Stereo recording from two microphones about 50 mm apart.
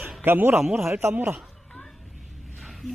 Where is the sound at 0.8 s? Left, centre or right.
Right.